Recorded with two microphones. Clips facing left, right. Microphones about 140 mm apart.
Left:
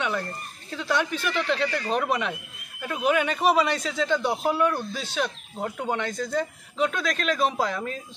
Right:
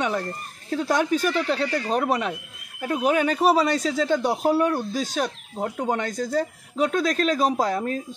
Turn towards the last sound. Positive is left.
turn(degrees=-45)  # may be behind; listen again after turning